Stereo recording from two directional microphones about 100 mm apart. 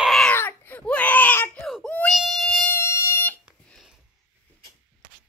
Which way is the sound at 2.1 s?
Centre (ahead or behind).